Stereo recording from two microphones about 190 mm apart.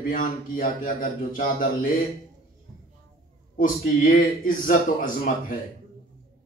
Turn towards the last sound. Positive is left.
turn(degrees=45)  # may be behind; listen again after turning